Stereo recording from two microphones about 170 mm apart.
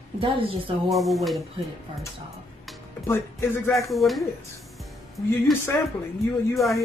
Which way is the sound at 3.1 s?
15° left (ahead or behind).